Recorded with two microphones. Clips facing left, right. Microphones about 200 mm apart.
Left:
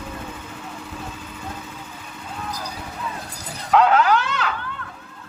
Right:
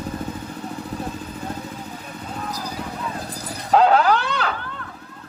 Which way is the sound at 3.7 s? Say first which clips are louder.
Right 1 dB; 35° right (ahead or behind).